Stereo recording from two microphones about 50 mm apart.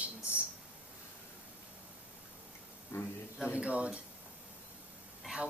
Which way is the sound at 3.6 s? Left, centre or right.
Right.